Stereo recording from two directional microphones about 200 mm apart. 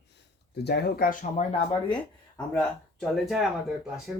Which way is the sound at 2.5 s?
Centre (ahead or behind).